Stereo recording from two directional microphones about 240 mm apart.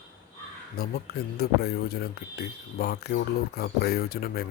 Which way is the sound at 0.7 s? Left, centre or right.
Left.